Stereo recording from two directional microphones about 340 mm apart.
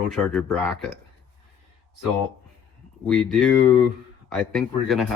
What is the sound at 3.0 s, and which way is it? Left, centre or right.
Speech, centre.